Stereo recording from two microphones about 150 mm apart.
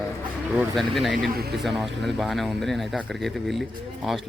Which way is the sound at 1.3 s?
90° right.